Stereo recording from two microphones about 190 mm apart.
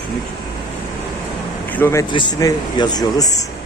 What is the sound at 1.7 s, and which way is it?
Speech, 10° left (ahead or behind).